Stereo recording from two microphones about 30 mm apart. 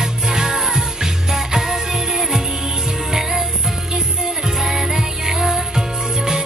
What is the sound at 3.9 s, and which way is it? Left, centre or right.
Music, centre.